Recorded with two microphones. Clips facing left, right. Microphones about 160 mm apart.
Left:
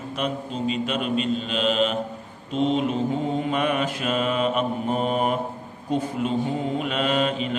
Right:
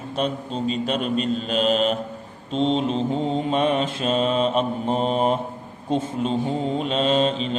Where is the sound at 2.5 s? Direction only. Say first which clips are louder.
Right 1 dB; 30° right (ahead or behind).